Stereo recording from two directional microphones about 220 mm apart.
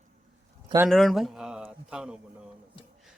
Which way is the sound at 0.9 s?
Centre (ahead or behind).